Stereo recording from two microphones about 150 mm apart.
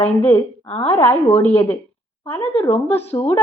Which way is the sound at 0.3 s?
40° left (ahead or behind).